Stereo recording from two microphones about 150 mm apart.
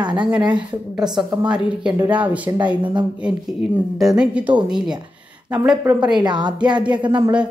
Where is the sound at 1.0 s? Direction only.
5° right (ahead or behind).